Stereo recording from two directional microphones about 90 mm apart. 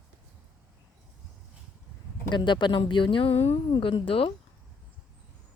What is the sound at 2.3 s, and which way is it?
A woman's voice, 60° left (ahead or behind).